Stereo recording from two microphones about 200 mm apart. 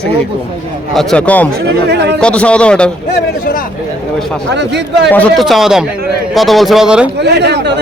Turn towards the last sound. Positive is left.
turn(degrees=-60)  # may be behind; listen again after turning